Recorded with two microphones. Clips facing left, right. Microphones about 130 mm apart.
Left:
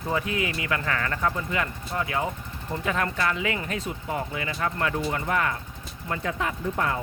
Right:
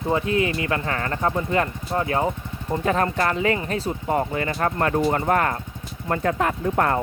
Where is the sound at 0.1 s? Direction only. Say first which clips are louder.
Right 6 dB; 30° right (ahead or behind); by 7.0 s 55° right (ahead or behind).